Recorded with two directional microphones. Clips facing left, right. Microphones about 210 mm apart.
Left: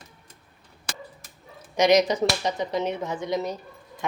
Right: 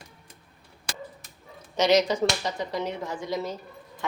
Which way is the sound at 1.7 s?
15° left (ahead or behind).